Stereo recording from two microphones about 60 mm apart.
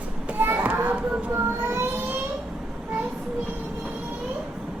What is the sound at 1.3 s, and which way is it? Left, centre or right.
Vehicle, right.